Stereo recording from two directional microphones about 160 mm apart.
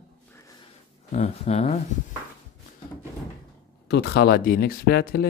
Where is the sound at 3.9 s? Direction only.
90° left.